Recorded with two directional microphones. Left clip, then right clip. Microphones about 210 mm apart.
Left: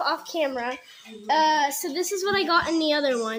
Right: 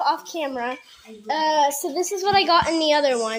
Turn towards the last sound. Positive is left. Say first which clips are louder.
# right 4 dB
turn(degrees=25)  # may be behind; listen again after turning